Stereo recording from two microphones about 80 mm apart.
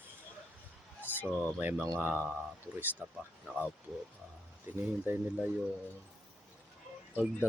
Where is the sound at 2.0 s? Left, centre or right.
Right.